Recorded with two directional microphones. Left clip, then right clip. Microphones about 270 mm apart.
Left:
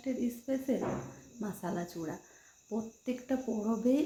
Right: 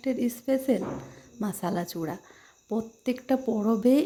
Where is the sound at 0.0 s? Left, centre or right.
Right.